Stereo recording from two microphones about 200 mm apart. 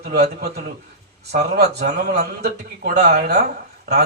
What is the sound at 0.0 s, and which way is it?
Speech, 50° right (ahead or behind).